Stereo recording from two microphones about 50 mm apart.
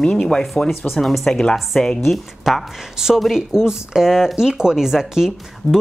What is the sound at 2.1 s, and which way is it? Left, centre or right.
A woman's voice, centre.